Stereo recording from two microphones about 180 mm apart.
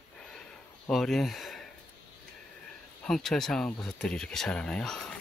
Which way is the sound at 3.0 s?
Centre (ahead or behind).